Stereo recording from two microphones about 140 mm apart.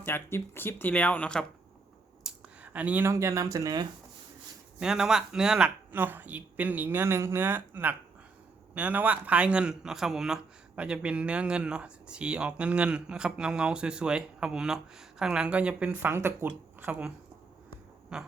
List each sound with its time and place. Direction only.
0.0 s speech: 15° left (ahead or behind)
2.2 s speech: 10° right (ahead or behind); by 3.8 s 25° right (ahead or behind)
4.8 s a man's voice: 5° right (ahead or behind)
18.1 s a sound: 5° right (ahead or behind)